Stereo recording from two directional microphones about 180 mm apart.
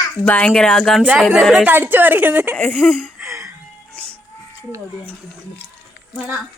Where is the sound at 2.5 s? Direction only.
10° left (ahead or behind).